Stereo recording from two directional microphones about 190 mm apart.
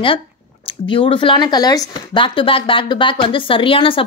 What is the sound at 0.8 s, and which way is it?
Speech, 30° left (ahead or behind).